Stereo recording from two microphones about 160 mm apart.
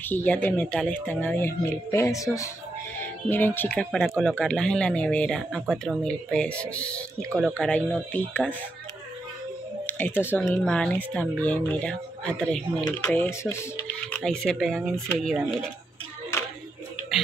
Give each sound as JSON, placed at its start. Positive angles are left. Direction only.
{"t": 0.1, "sound": "speech", "side_deg": 10}
{"t": 9.8, "sound": "speech", "side_deg": 10}
{"t": 14.2, "sound": "speech", "side_deg": 5}